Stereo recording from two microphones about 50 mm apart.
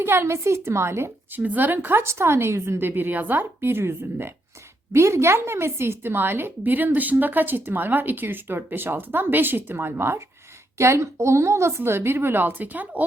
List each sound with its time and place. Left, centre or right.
0.0 s a woman's voice: right
1.5 s speech: right
2.0 s a woman's voice: right
4.9 s a woman's voice: right
10.8 s a woman's voice: right
11.8 s a woman's voice: right